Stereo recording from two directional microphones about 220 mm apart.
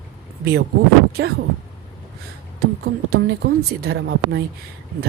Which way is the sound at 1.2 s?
50° right (ahead or behind).